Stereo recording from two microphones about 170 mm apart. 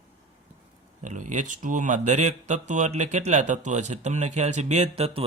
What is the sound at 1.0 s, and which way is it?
Speech, 45° right (ahead or behind).